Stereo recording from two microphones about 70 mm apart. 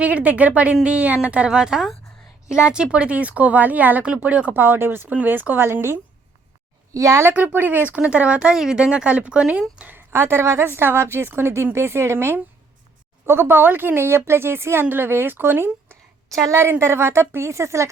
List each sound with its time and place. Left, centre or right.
0.0 s a woman's voice: right
6.9 s speech: right
7.3 s speech: right
7.9 s a woman's voice: centre
10.1 s speech: right